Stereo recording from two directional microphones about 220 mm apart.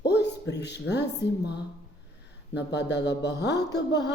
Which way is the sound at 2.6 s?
50° left (ahead or behind).